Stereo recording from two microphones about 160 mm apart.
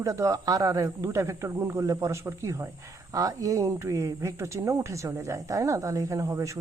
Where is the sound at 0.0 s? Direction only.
20° right (ahead or behind).